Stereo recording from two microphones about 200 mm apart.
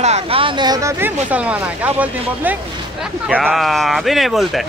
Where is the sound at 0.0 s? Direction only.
30° right (ahead or behind); by 4.6 s centre (ahead or behind).